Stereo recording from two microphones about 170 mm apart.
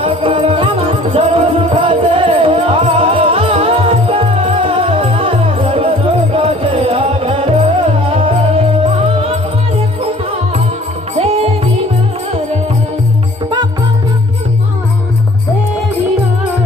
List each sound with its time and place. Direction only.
0.0 s music: 30° right (ahead or behind)
11.1 s music: 35° right (ahead or behind)